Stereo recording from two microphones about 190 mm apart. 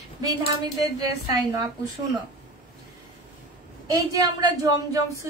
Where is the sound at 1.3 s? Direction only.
20° right (ahead or behind).